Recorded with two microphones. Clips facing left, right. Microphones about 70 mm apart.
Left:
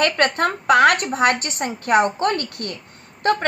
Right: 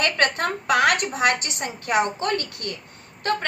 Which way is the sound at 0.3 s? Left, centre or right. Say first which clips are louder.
Left 5 dB; left.